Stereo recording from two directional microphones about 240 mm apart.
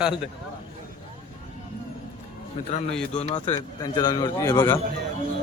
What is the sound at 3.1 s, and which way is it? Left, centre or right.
A man's voice, left.